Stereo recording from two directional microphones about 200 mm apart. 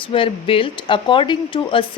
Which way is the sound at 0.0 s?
25° left (ahead or behind).